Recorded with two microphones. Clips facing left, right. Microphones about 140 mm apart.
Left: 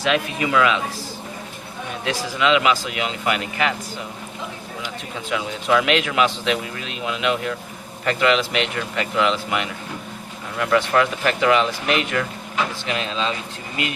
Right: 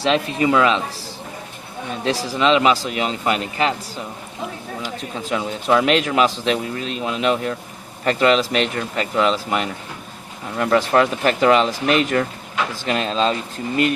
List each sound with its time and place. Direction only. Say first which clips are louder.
0.0 s a man's voice: right 3 dB; 30° right (ahead or behind)
2.0 s a man's voice: right 2 dB; 30° right (ahead or behind)
5.1 s a man's voice: right 2 dB; 35° right (ahead or behind)